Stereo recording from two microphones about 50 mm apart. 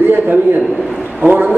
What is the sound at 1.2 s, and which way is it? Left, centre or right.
Speech, right.